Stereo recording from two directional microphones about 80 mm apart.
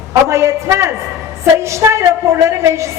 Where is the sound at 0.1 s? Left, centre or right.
Right.